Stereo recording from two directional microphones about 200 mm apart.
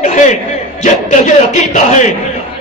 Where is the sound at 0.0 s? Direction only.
35° left (ahead or behind).